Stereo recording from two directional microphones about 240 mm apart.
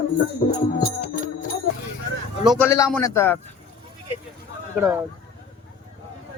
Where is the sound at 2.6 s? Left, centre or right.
Centre.